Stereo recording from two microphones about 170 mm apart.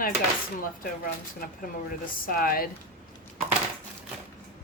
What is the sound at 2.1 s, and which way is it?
Speech, 60° left (ahead or behind).